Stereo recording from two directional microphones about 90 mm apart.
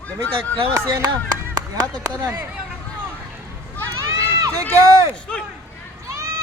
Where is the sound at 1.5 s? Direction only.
50° right (ahead or behind).